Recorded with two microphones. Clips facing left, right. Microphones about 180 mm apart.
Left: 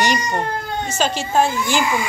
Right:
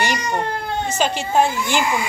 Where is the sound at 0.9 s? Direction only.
15° right (ahead or behind).